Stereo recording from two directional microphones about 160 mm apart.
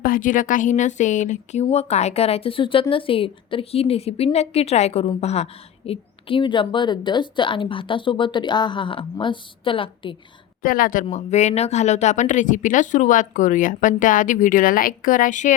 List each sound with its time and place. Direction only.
0.0 s a woman's voice: 60° left (ahead or behind); by 10.2 s 30° left (ahead or behind)
10.6 s a woman's voice: 60° left (ahead or behind)
11.1 s speech: 45° left (ahead or behind)